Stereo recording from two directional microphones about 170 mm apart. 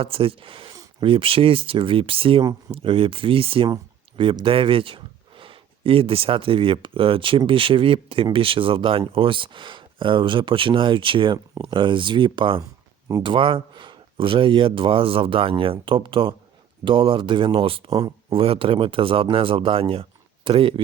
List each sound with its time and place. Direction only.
0.0 s speech: 35° right (ahead or behind)
17.9 s speech: 20° right (ahead or behind)
18.3 s speech: 35° right (ahead or behind)